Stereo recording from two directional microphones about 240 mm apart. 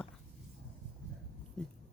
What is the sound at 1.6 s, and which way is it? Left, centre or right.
Speech, centre.